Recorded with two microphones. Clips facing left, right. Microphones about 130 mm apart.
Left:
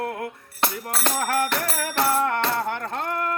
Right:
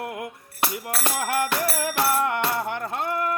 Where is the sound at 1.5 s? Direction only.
15° right (ahead or behind).